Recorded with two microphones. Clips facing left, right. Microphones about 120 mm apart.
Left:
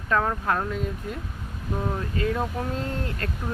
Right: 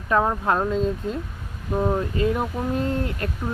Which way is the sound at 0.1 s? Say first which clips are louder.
Right 3 dB; 20° right (ahead or behind).